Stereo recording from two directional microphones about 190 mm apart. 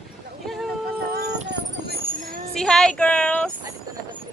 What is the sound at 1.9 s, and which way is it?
Vehicle, 50° right (ahead or behind).